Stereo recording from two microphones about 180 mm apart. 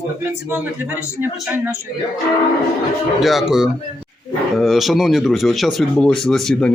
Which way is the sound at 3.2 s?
Centre (ahead or behind).